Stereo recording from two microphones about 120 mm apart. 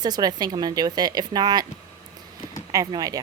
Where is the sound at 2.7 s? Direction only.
30° right (ahead or behind).